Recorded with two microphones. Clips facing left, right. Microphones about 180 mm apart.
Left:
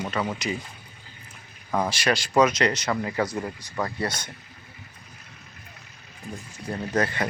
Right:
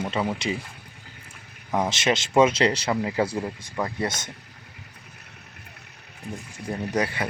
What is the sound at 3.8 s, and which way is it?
Speech, 20° right (ahead or behind).